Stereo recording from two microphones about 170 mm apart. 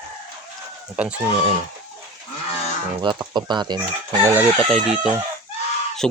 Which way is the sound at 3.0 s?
25° right (ahead or behind).